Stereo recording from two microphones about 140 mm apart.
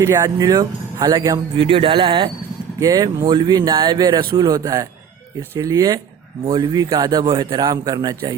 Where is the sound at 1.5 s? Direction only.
40° right (ahead or behind).